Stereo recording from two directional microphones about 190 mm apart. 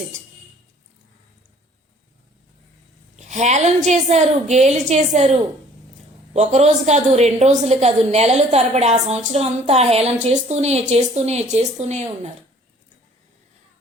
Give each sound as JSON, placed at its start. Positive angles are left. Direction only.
{"t": 3.2, "sound": "a sound", "side_deg": -40}
{"t": 3.8, "sound": "a woman's voice", "side_deg": -35}
{"t": 6.3, "sound": "a woman's voice", "side_deg": -35}